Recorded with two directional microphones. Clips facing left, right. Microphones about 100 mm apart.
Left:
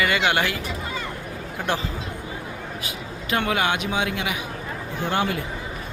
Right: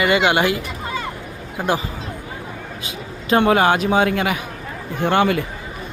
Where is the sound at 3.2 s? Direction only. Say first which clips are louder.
Right 8 dB; 35° right (ahead or behind).